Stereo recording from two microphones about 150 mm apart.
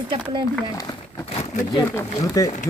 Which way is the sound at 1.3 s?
45° left (ahead or behind).